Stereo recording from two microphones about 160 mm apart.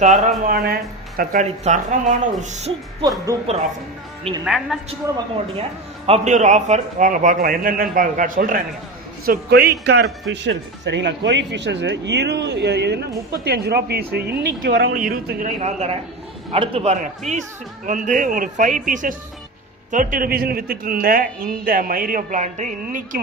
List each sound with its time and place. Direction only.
0.0 s speech: 50° right (ahead or behind)
0.5 s speech: 70° right (ahead or behind)
1.6 s speech: 50° right (ahead or behind)
3.0 s speech: 20° right (ahead or behind)
4.4 s a man's voice: centre (ahead or behind)
6.1 s a man's voice: 45° right (ahead or behind)
9.2 s speech: 80° right; by 15.7 s 60° right (ahead or behind)
16.5 s a man's voice: 35° right (ahead or behind); by 23.2 s 55° right (ahead or behind)